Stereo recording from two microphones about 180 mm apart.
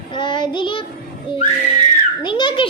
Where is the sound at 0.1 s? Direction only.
25° left (ahead or behind).